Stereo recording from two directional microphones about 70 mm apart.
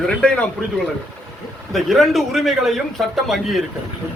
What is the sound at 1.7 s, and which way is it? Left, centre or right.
Speech, centre.